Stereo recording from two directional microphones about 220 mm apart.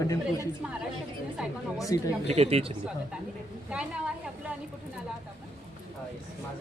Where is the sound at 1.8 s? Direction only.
15° left (ahead or behind).